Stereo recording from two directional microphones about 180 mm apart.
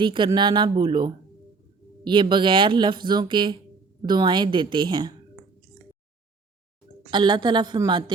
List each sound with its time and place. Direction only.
0.0 s speech: 25° right (ahead or behind)
7.1 s speech: 25° right (ahead or behind)